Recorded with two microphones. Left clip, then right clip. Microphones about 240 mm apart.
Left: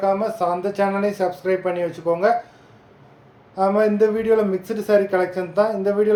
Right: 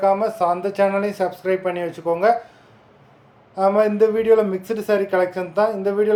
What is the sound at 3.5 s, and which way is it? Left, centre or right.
Speech, centre.